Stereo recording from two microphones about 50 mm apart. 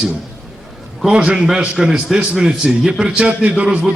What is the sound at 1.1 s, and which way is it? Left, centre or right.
A man's voice, centre.